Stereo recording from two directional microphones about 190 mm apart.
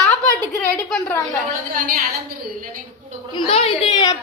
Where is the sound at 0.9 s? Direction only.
10° left (ahead or behind).